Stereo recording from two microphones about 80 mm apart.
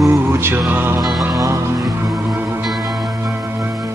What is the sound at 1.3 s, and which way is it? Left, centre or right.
Music, right.